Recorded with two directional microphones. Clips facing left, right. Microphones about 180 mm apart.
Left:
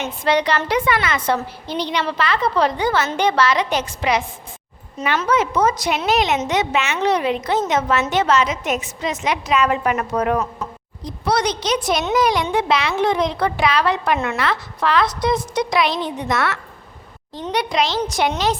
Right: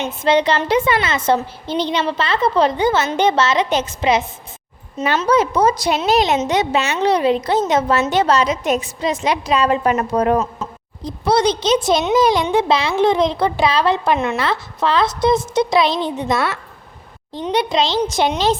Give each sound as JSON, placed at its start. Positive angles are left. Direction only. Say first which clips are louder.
{"t": 0.0, "sound": "a woman's voice", "louder": "right 3 dB", "side_deg": -25}